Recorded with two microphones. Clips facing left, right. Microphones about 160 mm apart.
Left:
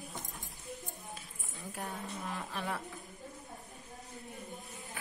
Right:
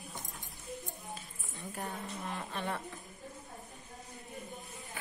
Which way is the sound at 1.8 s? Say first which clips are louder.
Even; centre (ahead or behind).